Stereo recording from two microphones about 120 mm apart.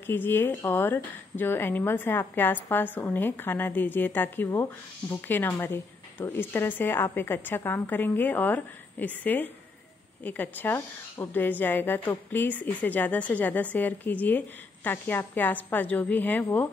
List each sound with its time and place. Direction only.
0.0 s a woman's voice: 15° left (ahead or behind)